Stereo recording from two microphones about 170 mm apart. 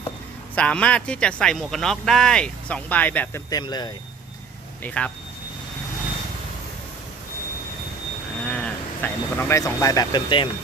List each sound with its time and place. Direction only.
0.5 s speech: 5° left (ahead or behind)
3.5 s speech: 25° left (ahead or behind)
4.8 s speech: 5° left (ahead or behind)
8.4 s speech: 5° left (ahead or behind); by 10.5 s 30° left (ahead or behind)